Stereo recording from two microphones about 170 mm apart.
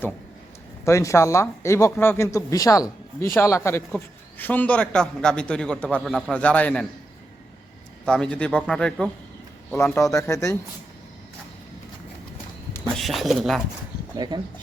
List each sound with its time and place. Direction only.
0.9 s a man's voice: 15° left (ahead or behind)
8.0 s a man's voice: 5° left (ahead or behind)
13.0 s speech: centre (ahead or behind)
14.2 s speech: 25° right (ahead or behind)